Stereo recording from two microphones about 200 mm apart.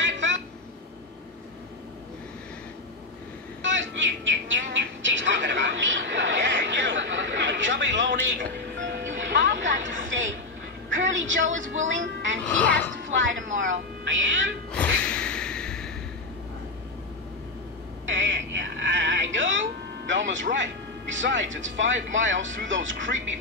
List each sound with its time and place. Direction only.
0.0 s a sound: 65° right (ahead or behind)
3.6 s bird: 70° right (ahead or behind)
8.7 s music: 65° right (ahead or behind)
10.0 s speech: 70° right (ahead or behind)
12.4 s speech: 5° left (ahead or behind)
12.9 s speech: 70° right (ahead or behind)
14.7 s music: 5° left (ahead or behind)
18.0 s a sound: 70° right (ahead or behind)
20.1 s speech: 70° right (ahead or behind)